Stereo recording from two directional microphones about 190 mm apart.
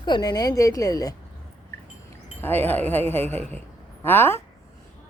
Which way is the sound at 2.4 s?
10° left (ahead or behind).